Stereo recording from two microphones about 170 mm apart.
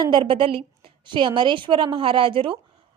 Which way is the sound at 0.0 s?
30° right (ahead or behind).